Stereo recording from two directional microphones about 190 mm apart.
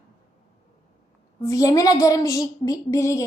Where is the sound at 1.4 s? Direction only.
15° left (ahead or behind).